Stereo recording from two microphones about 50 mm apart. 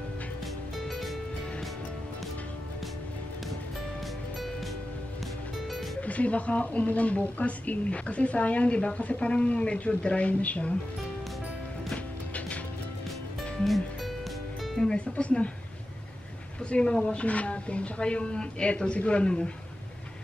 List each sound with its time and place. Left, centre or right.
0.7 s music: centre
5.9 s a woman's voice: left
11.9 s music: left
13.4 s music: centre
14.8 s music: centre
16.6 s a woman's voice: centre